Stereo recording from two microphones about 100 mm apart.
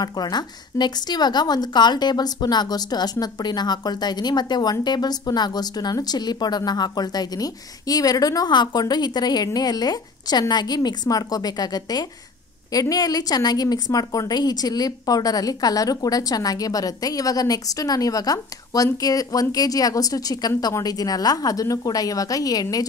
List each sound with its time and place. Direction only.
0.0 s a woman's voice: 45° left (ahead or behind)